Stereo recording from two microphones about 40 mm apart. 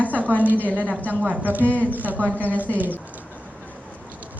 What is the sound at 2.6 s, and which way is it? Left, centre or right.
Speech, right.